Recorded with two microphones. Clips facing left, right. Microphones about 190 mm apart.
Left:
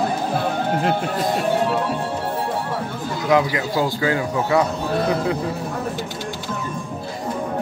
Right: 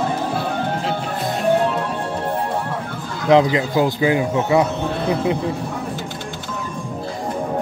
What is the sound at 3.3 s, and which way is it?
Speech, 25° right (ahead or behind).